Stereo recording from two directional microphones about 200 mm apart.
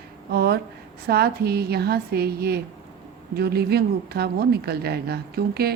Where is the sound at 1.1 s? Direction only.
50° right (ahead or behind).